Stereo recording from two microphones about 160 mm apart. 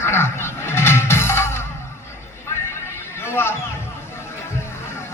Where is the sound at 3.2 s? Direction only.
15° left (ahead or behind).